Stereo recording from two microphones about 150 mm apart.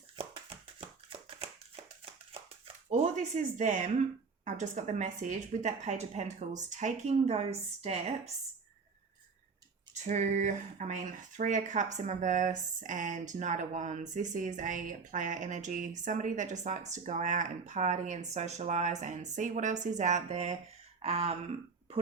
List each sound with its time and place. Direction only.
0.2 s tap: 40° right (ahead or behind)
2.3 s a sound: 40° right (ahead or behind)
2.9 s a woman's voice: 55° right (ahead or behind)
9.9 s a woman's voice: 50° right (ahead or behind)